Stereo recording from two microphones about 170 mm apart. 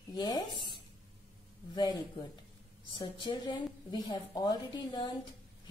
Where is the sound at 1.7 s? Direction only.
25° left (ahead or behind).